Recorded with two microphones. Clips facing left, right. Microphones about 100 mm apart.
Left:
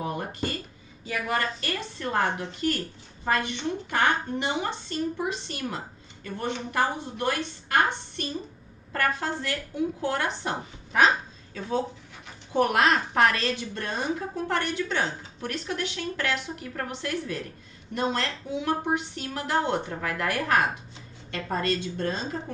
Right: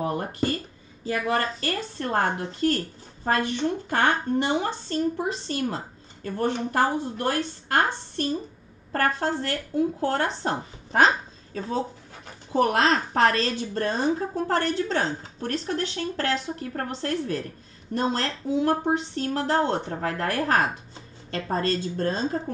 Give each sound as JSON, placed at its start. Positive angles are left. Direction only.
{"t": 0.0, "sound": "a sound", "side_deg": -40}
{"t": 1.0, "sound": "a woman's voice", "side_deg": -35}
{"t": 12.5, "sound": "a woman's voice", "side_deg": -30}